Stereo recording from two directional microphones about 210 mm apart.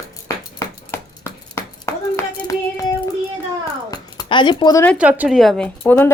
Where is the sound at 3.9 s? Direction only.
20° left (ahead or behind).